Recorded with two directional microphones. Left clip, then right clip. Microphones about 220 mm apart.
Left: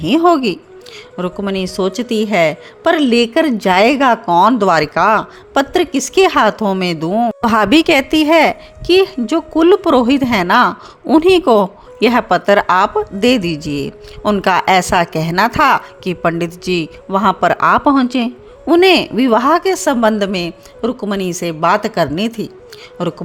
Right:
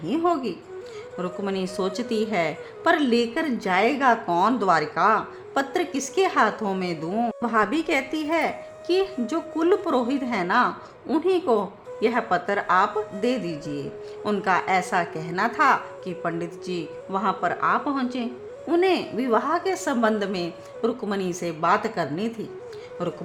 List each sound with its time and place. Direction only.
0.0 s a woman's voice: 45° left (ahead or behind)
7.4 s a woman's voice: 45° left (ahead or behind)